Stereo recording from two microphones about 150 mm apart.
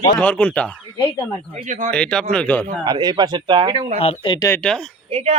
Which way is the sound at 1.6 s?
55° right (ahead or behind).